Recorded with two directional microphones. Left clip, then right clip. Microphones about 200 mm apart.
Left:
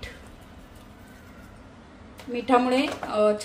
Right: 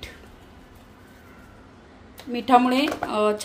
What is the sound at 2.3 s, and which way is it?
Speech, 45° right (ahead or behind).